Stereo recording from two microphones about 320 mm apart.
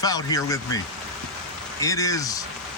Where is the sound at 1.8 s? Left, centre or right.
Centre.